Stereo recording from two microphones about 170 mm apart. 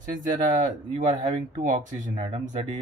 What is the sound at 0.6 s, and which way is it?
Speech, 45° right (ahead or behind).